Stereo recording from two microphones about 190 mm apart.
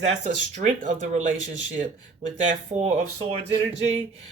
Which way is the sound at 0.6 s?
40° right (ahead or behind).